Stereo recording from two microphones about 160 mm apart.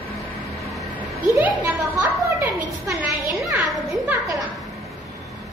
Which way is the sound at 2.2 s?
20° right (ahead or behind).